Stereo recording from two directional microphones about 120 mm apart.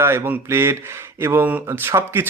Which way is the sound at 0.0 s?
20° right (ahead or behind).